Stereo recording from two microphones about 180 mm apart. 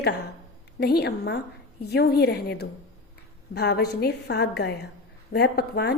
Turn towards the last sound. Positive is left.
turn(degrees=65)  # may be behind; listen again after turning